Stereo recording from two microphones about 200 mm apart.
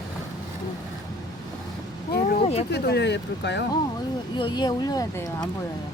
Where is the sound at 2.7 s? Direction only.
55° left (ahead or behind).